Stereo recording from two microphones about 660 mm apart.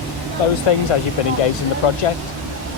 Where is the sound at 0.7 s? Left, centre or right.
Left.